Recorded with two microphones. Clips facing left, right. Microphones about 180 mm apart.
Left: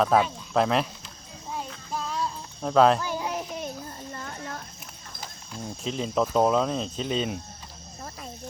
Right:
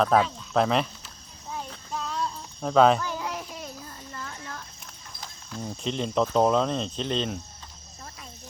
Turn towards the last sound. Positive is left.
turn(degrees=5)  # may be behind; listen again after turning